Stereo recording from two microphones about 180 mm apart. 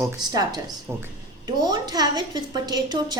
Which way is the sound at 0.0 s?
20° right (ahead or behind).